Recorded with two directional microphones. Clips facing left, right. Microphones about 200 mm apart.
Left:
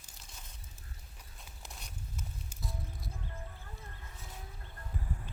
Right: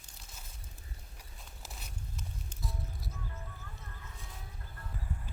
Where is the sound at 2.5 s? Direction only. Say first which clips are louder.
Right 1 dB; centre (ahead or behind).